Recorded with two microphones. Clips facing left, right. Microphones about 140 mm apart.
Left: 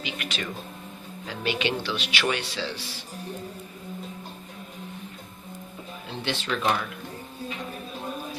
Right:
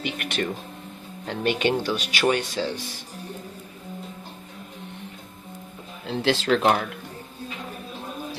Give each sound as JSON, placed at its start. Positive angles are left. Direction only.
{"t": 0.0, "sound": "speech", "side_deg": -55}
{"t": 6.1, "sound": "speech", "side_deg": -90}